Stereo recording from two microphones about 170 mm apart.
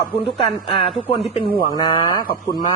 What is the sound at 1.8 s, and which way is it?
Speech, 20° left (ahead or behind).